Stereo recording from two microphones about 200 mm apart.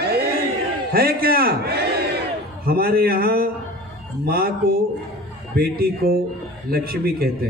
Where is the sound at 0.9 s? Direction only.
50° right (ahead or behind).